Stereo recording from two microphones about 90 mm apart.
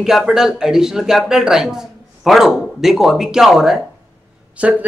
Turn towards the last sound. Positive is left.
turn(degrees=-15)  # may be behind; listen again after turning